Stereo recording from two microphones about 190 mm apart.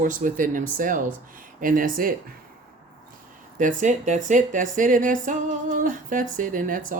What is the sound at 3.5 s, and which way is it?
Speech, 40° right (ahead or behind).